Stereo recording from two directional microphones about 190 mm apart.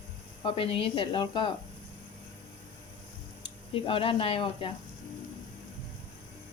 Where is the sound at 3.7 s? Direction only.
30° left (ahead or behind).